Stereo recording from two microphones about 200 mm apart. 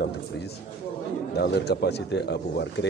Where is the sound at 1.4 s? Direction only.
55° left (ahead or behind).